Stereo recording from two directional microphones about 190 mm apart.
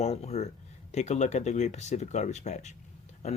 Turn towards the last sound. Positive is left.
turn(degrees=35)  # may be behind; listen again after turning